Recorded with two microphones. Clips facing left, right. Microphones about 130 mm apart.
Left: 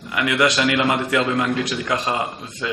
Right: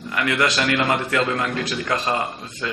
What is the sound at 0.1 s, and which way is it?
A man's voice, 15° left (ahead or behind).